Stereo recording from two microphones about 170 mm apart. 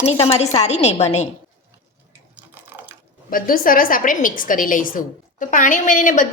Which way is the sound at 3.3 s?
55° left (ahead or behind).